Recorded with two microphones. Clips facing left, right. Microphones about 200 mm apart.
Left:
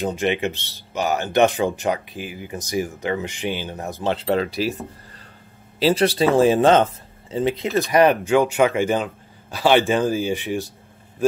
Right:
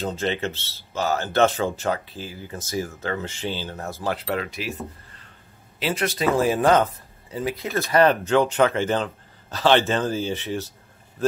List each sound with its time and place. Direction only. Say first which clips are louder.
0.0 s speech: left 4 dB; 15° left (ahead or behind)